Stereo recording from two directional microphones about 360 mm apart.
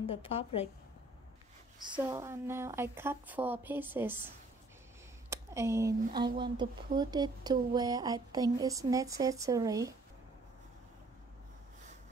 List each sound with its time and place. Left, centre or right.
0.0 s a woman's voice: centre
1.8 s speech: centre
5.3 s speech: centre